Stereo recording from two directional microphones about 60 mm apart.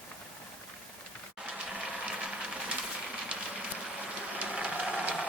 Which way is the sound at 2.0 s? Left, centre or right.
Centre.